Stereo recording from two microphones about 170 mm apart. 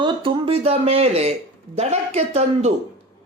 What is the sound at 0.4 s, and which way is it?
A man's voice, 35° right (ahead or behind).